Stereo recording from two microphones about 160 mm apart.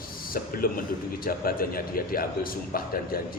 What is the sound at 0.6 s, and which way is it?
A man's voice, 65° left (ahead or behind).